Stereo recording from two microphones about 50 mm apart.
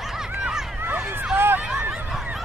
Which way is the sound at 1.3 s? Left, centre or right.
Right.